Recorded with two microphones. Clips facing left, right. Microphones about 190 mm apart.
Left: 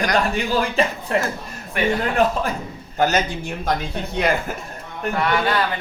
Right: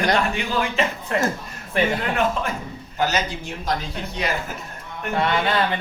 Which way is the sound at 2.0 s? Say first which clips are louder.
Left 3 dB; 35° left (ahead or behind).